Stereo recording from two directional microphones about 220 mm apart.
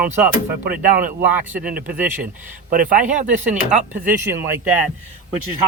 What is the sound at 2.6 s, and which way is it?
Speech, 40° right (ahead or behind).